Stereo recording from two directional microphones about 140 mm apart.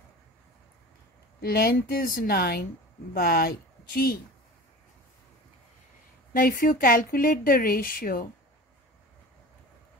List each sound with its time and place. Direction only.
1.4 s a woman's voice: 90° left
6.3 s speech: 85° left